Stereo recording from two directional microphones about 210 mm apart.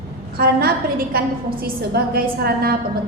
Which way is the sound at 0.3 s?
45° right (ahead or behind).